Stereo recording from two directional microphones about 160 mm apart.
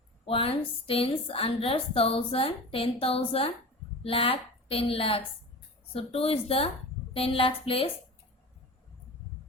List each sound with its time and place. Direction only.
0.3 s a woman's voice: 35° left (ahead or behind)